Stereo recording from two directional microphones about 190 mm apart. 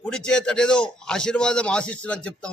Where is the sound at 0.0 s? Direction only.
5° left (ahead or behind).